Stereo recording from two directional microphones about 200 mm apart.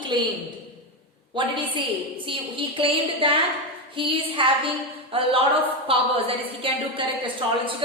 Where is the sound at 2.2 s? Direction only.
25° right (ahead or behind).